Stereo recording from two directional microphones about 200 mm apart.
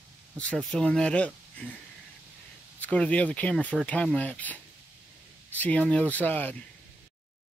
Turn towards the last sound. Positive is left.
turn(degrees=10)  # may be behind; listen again after turning